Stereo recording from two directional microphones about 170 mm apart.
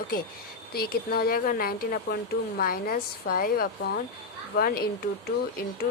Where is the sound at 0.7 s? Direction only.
65° left (ahead or behind).